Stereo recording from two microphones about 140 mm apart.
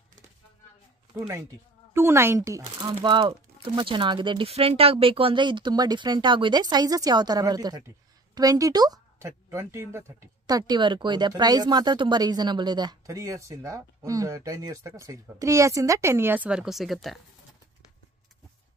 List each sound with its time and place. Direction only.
1.1 s speech: 20° right (ahead or behind)
2.8 s speech: 35° right (ahead or behind); by 17.2 s centre (ahead or behind)